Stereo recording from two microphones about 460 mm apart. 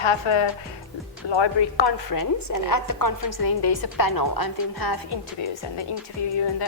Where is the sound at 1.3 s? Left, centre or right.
Left.